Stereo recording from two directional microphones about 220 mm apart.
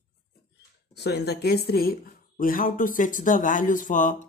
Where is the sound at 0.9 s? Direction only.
50° left (ahead or behind).